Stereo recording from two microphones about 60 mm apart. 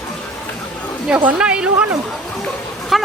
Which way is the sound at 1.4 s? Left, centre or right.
Centre.